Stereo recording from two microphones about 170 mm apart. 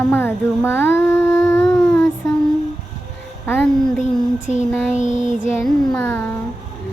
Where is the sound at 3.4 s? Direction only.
10° left (ahead or behind).